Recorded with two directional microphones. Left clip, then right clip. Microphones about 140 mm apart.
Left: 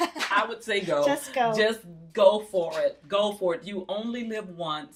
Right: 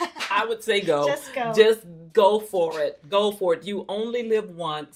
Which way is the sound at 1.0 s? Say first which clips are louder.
Even; 35° left (ahead or behind).